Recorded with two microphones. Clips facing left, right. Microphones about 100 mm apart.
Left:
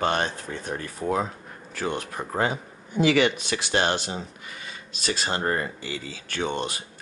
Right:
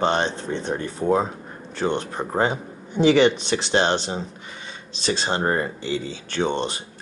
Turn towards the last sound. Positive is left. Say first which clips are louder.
# right 4 dB
turn(degrees=-30)  # may be behind; listen again after turning